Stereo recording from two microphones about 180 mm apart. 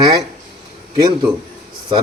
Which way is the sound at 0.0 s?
20° right (ahead or behind).